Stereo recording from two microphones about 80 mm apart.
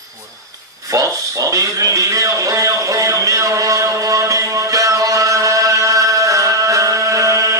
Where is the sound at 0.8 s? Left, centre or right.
Right.